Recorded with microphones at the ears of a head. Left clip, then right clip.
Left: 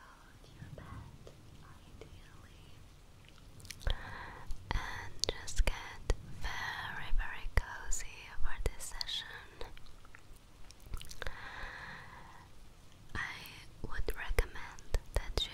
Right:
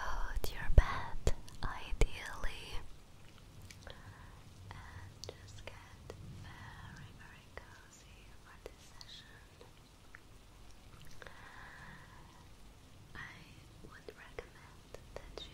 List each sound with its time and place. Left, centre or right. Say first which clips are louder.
0.0 s whispering: right 15 dB; right
3.6 s whispering: left 10 dB; left
11.0 s a sound: left 9 dB; left
13.1 s whispering: left 9 dB; left